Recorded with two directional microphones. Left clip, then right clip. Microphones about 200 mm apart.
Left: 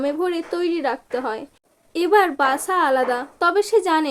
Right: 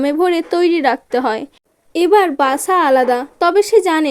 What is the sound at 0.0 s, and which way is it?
A woman's voice, 45° right (ahead or behind).